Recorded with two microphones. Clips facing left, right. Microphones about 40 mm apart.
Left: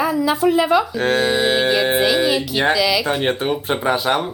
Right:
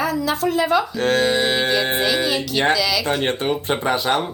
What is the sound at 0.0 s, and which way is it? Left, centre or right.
Speech, centre.